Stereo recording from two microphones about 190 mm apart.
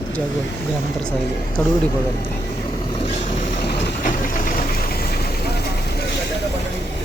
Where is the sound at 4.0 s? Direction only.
45° left (ahead or behind).